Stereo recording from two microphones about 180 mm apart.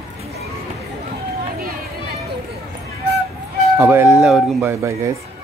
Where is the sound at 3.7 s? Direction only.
15° right (ahead or behind).